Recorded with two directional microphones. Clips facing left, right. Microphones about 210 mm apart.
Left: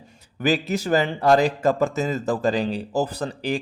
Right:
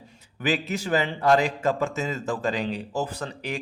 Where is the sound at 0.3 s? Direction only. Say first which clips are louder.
Left 4 dB; 40° left (ahead or behind).